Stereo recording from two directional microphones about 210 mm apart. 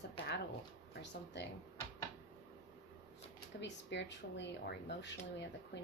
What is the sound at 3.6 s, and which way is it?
Speech, 55° left (ahead or behind).